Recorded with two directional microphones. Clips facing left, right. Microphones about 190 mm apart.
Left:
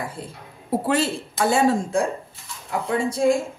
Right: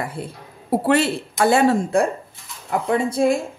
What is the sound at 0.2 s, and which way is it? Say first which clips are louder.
A woman's voice: right 4 dB; 65° right (ahead or behind).